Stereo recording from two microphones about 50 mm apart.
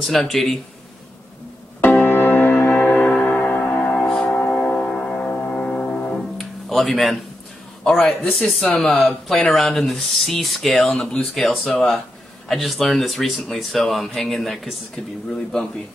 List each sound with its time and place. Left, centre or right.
0.0 s speech: centre
1.8 s music: left
3.1 s music: left
3.9 s music: centre
4.3 s music: left
4.8 s music: centre
6.2 s music: centre
7.9 s speech: centre
10.9 s a man's voice: centre
15.3 s a man's voice: centre